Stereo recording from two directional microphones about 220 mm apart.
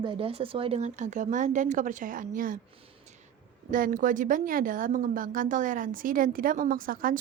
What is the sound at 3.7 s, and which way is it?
Speech, 35° right (ahead or behind).